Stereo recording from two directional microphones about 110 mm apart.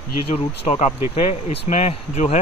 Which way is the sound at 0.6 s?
80° left.